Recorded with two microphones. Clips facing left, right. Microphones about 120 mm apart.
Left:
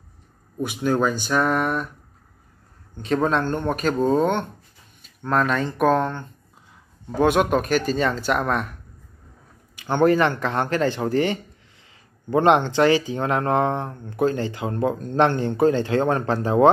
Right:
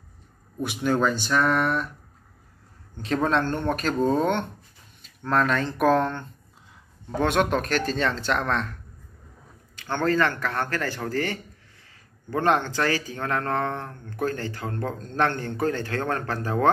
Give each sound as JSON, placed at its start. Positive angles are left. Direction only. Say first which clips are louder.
{"t": 0.6, "sound": "speech", "louder": "left 2 dB", "side_deg": 0}
{"t": 3.0, "sound": "speech", "louder": "left 2 dB", "side_deg": 0}
{"t": 9.8, "sound": "speech", "louder": "left 5 dB", "side_deg": 15}